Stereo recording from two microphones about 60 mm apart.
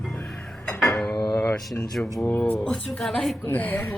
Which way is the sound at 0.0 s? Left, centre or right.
Centre.